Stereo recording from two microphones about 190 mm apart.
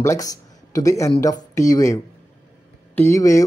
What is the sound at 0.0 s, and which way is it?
Speech, 15° left (ahead or behind).